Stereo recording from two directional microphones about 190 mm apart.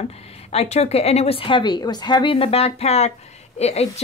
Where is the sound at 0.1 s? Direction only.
30° left (ahead or behind).